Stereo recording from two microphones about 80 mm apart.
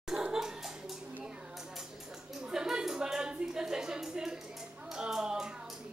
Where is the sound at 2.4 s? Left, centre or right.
Centre.